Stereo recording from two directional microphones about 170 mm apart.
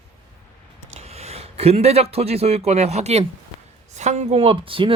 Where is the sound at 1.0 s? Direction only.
35° right (ahead or behind).